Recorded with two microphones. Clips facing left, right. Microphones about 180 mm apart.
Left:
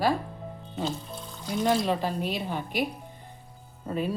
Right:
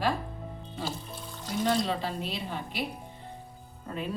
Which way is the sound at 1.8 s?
50° left (ahead or behind).